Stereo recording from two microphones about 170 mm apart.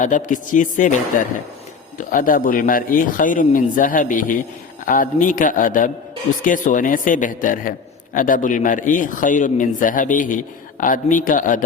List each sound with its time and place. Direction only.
0.0 s a man's voice: 50° left (ahead or behind)